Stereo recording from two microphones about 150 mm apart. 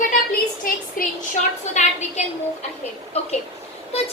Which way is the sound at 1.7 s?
50° left (ahead or behind).